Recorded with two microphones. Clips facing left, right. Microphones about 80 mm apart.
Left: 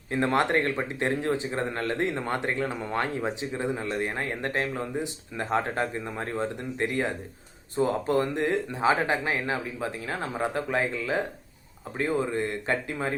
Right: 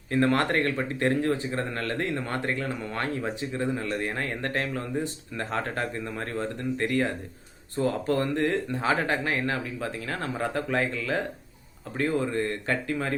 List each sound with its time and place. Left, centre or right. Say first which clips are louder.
0.1 s speech: even; centre